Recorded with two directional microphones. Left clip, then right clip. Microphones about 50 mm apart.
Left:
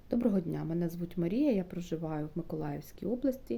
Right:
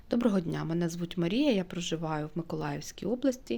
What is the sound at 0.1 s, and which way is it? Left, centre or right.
Speech, left.